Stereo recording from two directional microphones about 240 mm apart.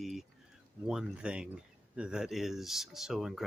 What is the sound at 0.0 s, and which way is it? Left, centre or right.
Speech, centre.